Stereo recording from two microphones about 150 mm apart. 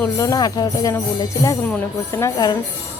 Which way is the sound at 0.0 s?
20° left (ahead or behind).